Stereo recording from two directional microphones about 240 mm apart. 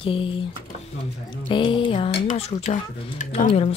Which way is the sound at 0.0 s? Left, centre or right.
Left.